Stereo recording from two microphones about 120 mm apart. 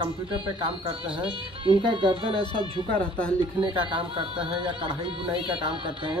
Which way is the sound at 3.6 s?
45° right (ahead or behind).